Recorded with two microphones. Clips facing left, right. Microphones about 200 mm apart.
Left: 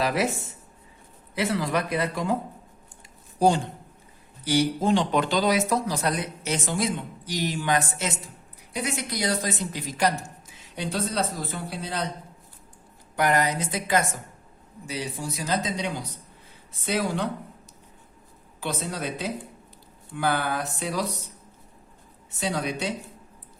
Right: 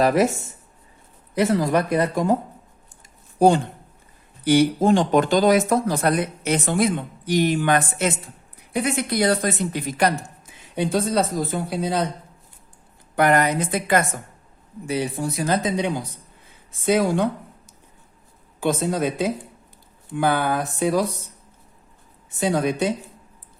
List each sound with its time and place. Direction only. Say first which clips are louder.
0.0 s speech: right 7 dB; 45° right (ahead or behind)
1.4 s speech: right 6 dB; 45° right (ahead or behind)
3.3 s speech: right 5 dB; 55° right (ahead or behind)
13.1 s speech: right 5 dB; 55° right (ahead or behind)
18.6 s speech: right 9 dB; 50° right (ahead or behind)
22.4 s speech: right 7 dB; 50° right (ahead or behind)